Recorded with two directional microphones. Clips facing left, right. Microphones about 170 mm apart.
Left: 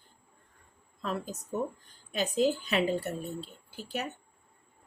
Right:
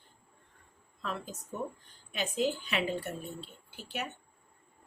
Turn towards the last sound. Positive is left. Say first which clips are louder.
# left 3 dB
turn(degrees=40)  # may be behind; listen again after turning